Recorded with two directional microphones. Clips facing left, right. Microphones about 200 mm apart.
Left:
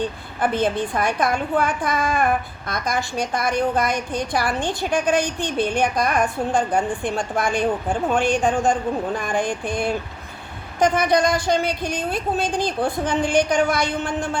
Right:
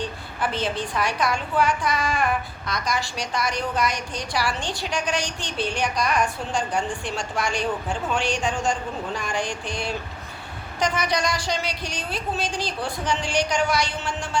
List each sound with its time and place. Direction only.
0.0 s a woman's voice: 50° left (ahead or behind)